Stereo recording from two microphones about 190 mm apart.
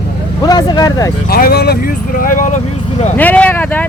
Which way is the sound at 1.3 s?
55° left (ahead or behind).